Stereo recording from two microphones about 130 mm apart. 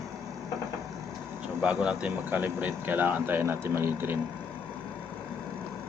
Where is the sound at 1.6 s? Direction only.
10° right (ahead or behind).